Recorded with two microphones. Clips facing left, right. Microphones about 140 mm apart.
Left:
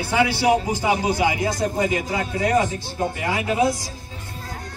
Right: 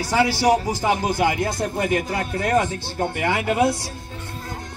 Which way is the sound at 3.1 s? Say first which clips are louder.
Right 2 dB; 70° right (ahead or behind).